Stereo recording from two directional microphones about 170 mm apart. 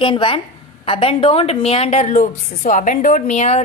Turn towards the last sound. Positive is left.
turn(degrees=40)  # may be behind; listen again after turning